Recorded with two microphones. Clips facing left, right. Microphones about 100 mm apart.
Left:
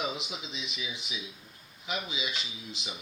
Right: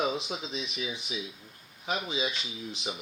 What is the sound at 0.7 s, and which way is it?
Speech, 35° right (ahead or behind).